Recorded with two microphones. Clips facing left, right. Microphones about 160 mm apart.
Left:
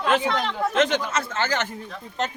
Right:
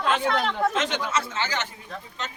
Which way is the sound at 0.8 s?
50° left (ahead or behind).